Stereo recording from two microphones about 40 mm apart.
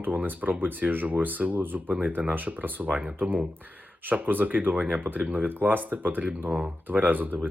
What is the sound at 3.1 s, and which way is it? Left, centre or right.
Speech, right.